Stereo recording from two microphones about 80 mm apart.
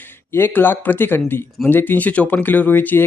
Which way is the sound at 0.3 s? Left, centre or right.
Left.